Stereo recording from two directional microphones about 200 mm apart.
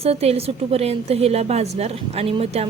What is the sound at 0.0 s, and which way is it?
A woman's voice, 30° right (ahead or behind).